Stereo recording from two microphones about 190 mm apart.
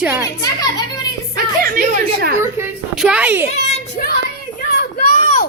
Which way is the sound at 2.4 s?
15° right (ahead or behind).